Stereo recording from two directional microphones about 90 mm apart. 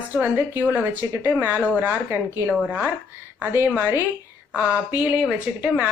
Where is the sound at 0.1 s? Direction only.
20° right (ahead or behind).